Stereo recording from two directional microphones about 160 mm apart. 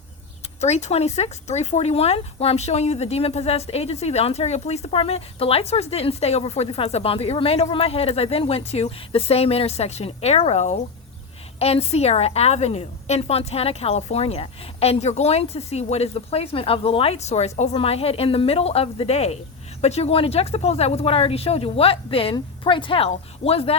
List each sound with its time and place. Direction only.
0.6 s speech: 45° left (ahead or behind)